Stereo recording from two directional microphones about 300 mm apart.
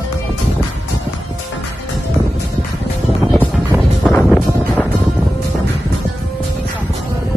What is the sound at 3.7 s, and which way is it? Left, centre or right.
Music, centre.